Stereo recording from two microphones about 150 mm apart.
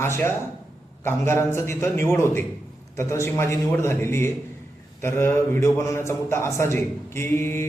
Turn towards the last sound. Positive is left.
turn(degrees=15)  # may be behind; listen again after turning